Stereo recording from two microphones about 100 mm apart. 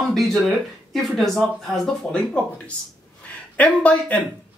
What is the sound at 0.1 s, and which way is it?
Speech, centre (ahead or behind).